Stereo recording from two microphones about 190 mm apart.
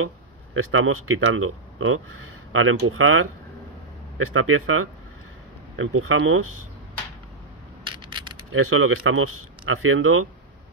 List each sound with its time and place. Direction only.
0.6 s speech: 90° right
4.3 s speech: 90° right
7.8 s a sound: 25° right (ahead or behind)
8.5 s speech: 90° right